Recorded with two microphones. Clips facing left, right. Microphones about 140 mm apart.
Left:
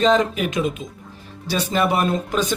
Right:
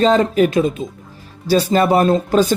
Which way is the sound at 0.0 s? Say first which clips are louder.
Right 4 dB; 35° right (ahead or behind).